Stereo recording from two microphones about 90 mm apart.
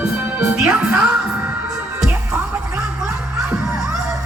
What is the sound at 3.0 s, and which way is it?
Music, 10° right (ahead or behind).